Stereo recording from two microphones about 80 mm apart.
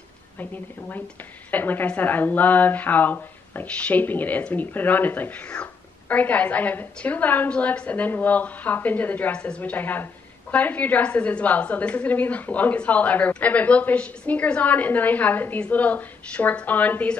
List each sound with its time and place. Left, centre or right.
0.4 s speech: left